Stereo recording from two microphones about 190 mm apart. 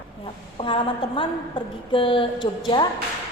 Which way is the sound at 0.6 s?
25° left (ahead or behind).